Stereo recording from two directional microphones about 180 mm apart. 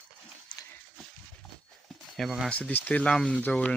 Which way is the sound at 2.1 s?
Centre (ahead or behind).